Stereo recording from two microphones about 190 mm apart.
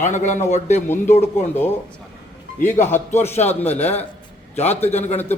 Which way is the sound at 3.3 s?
35° left (ahead or behind).